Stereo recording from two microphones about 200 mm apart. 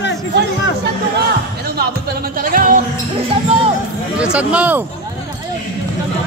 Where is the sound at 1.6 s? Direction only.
50° right (ahead or behind).